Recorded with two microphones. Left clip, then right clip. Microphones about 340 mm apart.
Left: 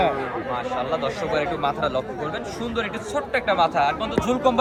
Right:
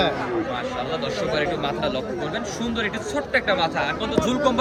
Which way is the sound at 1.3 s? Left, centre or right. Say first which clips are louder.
Left 1 dB; centre.